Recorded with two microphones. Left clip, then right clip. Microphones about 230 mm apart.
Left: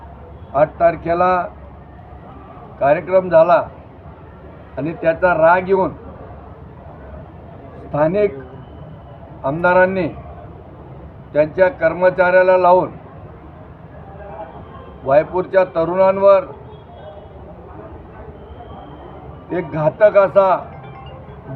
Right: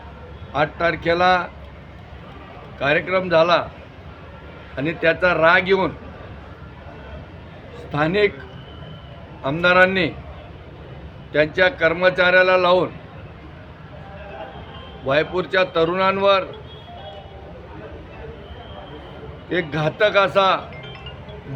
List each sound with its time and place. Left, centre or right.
0.5 s a man's voice: centre
2.7 s a man's voice: centre
4.8 s a man's voice: centre
7.9 s a man's voice: right
9.4 s a man's voice: centre
11.3 s a man's voice: centre
15.0 s a man's voice: right
19.5 s a man's voice: centre